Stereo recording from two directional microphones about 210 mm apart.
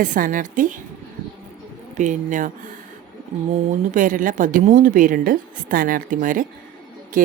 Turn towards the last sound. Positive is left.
turn(degrees=-40)  # may be behind; listen again after turning